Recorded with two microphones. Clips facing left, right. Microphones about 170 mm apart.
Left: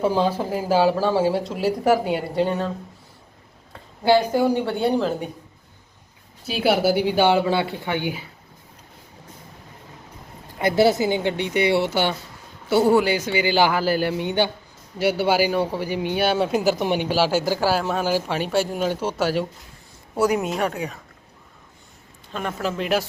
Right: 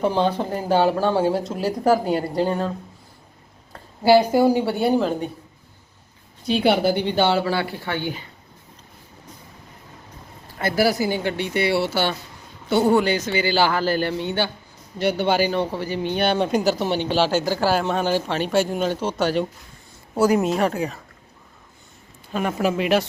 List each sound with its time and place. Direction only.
0.0 s a woman's voice: 5° left (ahead or behind)
6.4 s speech: 5° left (ahead or behind)
10.6 s speech: 20° left (ahead or behind)
12.6 s speech: 5° left (ahead or behind)
22.3 s speech: 10° right (ahead or behind)